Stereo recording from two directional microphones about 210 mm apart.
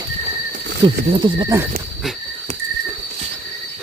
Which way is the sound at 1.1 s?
20° right (ahead or behind).